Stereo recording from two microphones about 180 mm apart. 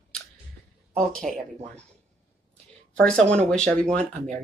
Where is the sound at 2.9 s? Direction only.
5° left (ahead or behind).